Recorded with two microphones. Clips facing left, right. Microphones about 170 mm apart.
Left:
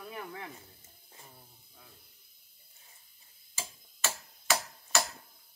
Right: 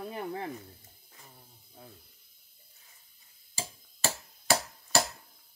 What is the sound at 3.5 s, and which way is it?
Tick-tock, 35° right (ahead or behind).